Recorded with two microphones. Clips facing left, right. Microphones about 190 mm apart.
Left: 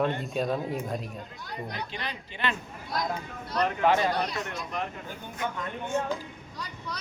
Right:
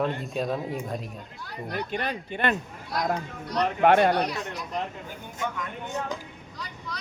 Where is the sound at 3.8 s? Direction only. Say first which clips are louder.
Right 6 dB; 60° right (ahead or behind).